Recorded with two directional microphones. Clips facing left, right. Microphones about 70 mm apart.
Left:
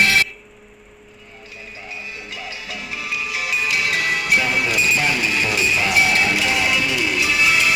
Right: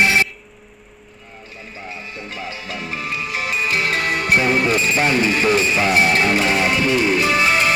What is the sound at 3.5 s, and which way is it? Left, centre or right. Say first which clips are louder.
Speech: right 1 dB; right.